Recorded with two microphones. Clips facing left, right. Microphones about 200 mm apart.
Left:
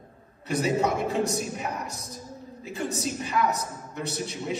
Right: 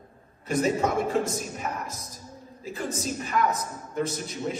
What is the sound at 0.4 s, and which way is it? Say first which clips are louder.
A man's voice: even; 50° right (ahead or behind).